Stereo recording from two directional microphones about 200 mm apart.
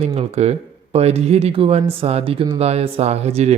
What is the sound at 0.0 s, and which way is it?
Speech, 30° right (ahead or behind).